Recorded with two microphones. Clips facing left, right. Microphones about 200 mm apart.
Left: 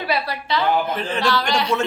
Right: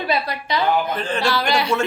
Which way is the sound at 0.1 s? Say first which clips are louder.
Even; 15° right (ahead or behind).